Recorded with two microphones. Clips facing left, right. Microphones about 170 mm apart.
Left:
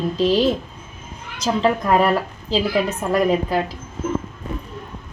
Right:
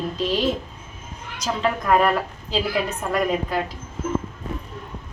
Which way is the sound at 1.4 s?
30° left (ahead or behind).